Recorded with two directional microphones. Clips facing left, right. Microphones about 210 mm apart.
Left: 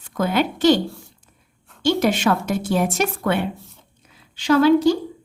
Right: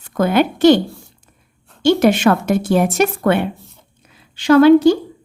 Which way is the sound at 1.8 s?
70° right (ahead or behind).